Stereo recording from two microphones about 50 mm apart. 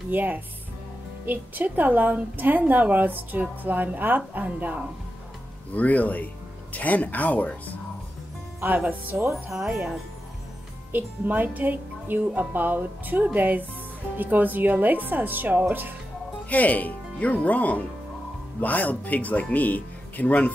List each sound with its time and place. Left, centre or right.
0.1 s a woman's voice: right
5.8 s speech: left
8.5 s a woman's voice: right
9.3 s speech: centre
10.9 s a woman's voice: right
16.4 s speech: left